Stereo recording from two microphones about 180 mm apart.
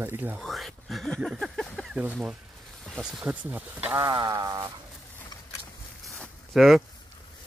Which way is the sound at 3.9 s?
25° right (ahead or behind).